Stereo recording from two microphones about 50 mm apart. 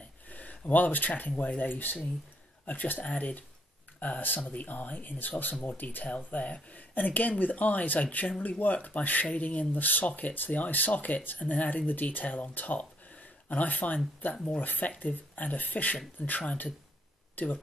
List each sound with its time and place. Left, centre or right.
0.3 s speech: left
6.0 s speech: left
14.3 s speech: centre
14.6 s speech: left